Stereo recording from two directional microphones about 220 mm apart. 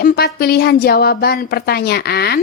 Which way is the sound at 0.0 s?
40° left (ahead or behind).